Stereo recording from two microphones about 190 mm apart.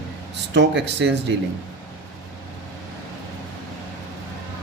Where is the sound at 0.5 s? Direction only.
70° right (ahead or behind).